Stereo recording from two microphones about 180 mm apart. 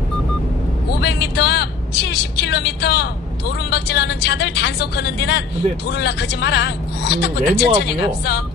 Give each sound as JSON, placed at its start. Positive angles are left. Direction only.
{"t": 1.0, "sound": "a woman's voice", "side_deg": 70}